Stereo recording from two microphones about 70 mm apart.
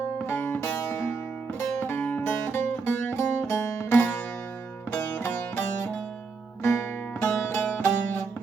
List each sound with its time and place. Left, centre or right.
0.3 s music: left
3.8 s music: left